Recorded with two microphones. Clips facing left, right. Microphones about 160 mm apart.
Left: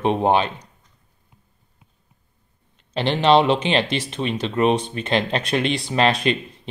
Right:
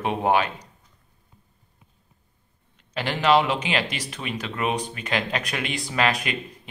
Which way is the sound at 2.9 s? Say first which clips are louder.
Left 4 dB; 25° left (ahead or behind).